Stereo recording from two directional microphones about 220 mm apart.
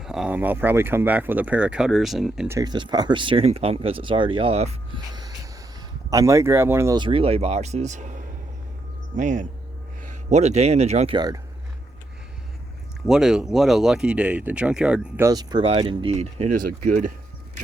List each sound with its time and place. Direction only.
0.0 s speech: centre (ahead or behind)
2.6 s speech: 20° right (ahead or behind)
6.1 s speech: 15° right (ahead or behind)
13.1 s speech: centre (ahead or behind); by 17.1 s 35° right (ahead or behind)